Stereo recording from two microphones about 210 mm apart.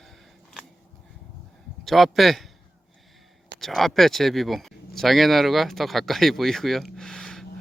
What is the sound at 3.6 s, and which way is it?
Speech, centre (ahead or behind).